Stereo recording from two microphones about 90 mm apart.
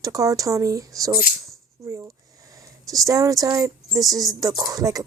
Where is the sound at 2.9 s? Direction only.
40° right (ahead or behind).